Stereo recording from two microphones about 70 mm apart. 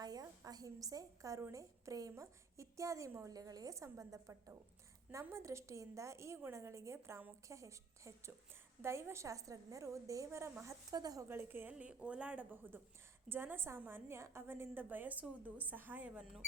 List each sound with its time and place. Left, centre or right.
0.0 s a sound: right
1.5 s a woman's voice: right
10.2 s a woman's voice: right
10.9 s speech: right
11.3 s a woman's voice: right
11.7 s a woman's voice: centre